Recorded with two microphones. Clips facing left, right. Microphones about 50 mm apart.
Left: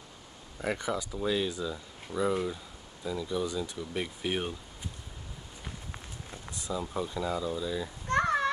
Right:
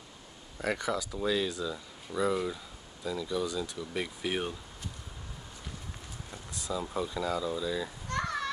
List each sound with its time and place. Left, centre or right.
0.7 s speech: centre
6.8 s speech: centre
8.1 s children playing: left